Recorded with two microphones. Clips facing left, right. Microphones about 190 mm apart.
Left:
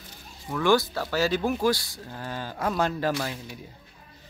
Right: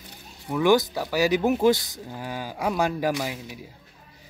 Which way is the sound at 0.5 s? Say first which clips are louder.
Right 3 dB; 15° right (ahead or behind).